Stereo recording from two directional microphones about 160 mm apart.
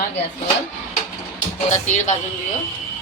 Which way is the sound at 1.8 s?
45° left (ahead or behind).